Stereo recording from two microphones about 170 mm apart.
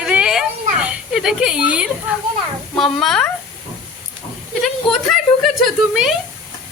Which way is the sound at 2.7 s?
Centre (ahead or behind).